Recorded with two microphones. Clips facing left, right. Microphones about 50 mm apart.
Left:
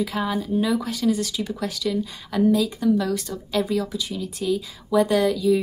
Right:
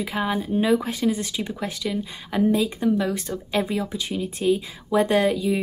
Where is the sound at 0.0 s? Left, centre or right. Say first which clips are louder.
Even; right.